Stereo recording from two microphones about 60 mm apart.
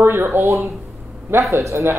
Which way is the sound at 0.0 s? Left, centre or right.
Right.